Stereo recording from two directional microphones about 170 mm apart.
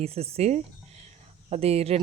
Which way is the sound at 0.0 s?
35° right (ahead or behind).